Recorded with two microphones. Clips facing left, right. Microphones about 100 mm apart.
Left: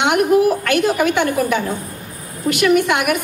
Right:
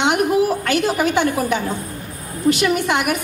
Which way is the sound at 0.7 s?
55° left (ahead or behind).